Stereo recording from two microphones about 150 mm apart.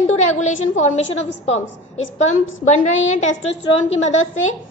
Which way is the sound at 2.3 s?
50° left (ahead or behind).